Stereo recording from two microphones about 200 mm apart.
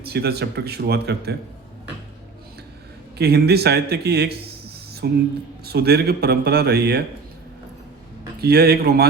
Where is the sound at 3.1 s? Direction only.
55° right (ahead or behind).